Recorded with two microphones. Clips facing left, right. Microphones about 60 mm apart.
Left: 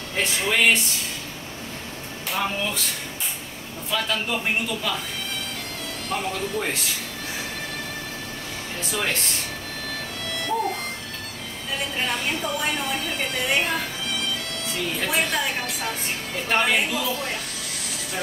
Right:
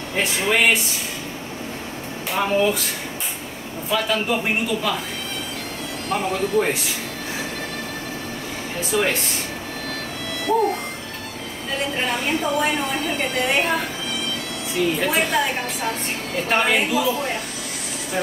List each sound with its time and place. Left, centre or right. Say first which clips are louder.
0.1 s a woman's voice: right 3 dB; centre
2.3 s a woman's voice: right 7 dB; centre
3.9 s speech: right 4 dB; centre
6.0 s a woman's voice: right 5 dB; centre
8.9 s a woman's voice: right 6 dB; centre
12.0 s a woman's voice: right 3 dB; centre